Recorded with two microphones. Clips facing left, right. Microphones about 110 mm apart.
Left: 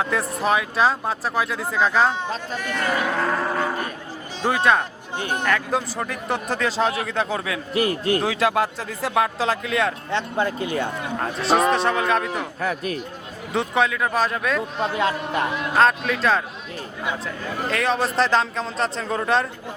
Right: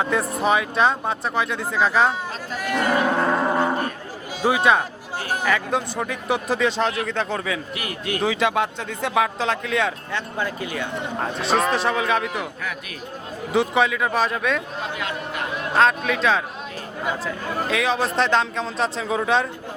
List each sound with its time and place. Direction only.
0.0 s speech: centre (ahead or behind)
2.6 s roaring cats: 10° right (ahead or behind)
4.4 s speech: 5° right (ahead or behind)
7.7 s speech: 35° left (ahead or behind)
8.2 s speech: centre (ahead or behind)
10.1 s speech: 25° left (ahead or behind)
11.2 s speech: centre (ahead or behind)
12.6 s speech: 40° left (ahead or behind)
13.5 s speech: centre (ahead or behind)
14.9 s speech: 30° left (ahead or behind)
15.7 s speech: centre (ahead or behind)
17.7 s speech: centre (ahead or behind)